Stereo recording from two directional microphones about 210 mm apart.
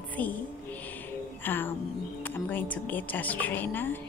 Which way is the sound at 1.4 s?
10° left (ahead or behind).